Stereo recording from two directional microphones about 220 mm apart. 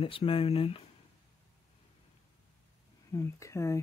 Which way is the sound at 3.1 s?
15° left (ahead or behind).